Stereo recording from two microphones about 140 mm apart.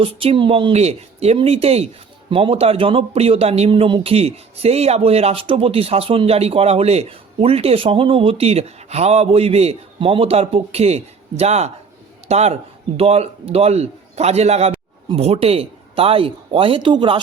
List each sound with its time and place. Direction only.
0.0 s a man's voice: 40° right (ahead or behind)